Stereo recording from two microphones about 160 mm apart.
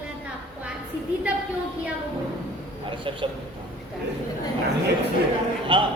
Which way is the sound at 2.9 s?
30° right (ahead or behind).